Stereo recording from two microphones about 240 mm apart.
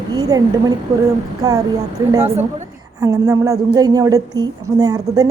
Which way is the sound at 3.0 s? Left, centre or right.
Centre.